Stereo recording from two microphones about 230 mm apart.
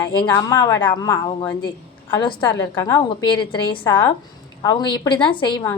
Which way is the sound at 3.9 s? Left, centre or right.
Centre.